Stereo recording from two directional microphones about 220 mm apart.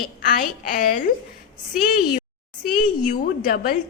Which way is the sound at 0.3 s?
40° left (ahead or behind).